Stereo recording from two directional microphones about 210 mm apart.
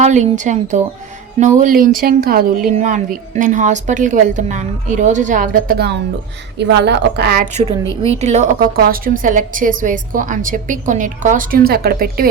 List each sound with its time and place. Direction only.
0.0 s a woman's voice: 35° right (ahead or behind); by 7.4 s 50° right (ahead or behind)
7.5 s a woman's voice: 30° right (ahead or behind); by 12.3 s 45° right (ahead or behind)